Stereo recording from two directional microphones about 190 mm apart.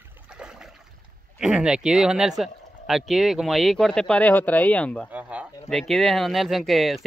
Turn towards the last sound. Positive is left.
turn(degrees=0)  # may be behind; listen again after turning